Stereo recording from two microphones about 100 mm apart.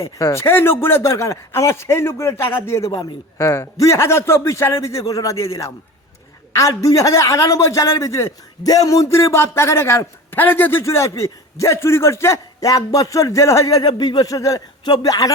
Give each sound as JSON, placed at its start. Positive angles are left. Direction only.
{"t": 0.0, "sound": "a man's voice", "side_deg": 30}
{"t": 13.8, "sound": "a man's voice", "side_deg": 50}